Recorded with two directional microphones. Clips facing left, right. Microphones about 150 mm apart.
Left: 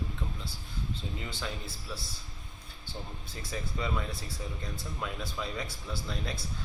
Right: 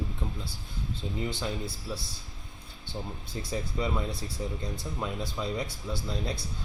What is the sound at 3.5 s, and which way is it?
Speech, 25° right (ahead or behind).